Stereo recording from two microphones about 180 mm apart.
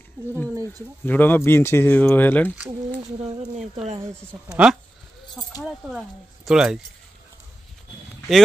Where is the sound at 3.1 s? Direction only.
35° right (ahead or behind).